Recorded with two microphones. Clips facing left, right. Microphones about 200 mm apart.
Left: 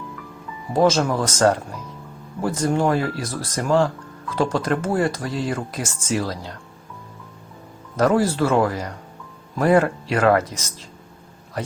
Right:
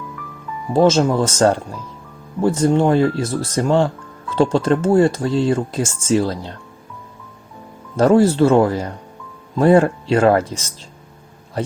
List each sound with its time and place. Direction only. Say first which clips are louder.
0.7 s speech: right 4 dB; 25° right (ahead or behind)
7.9 s speech: right 6 dB; 25° right (ahead or behind)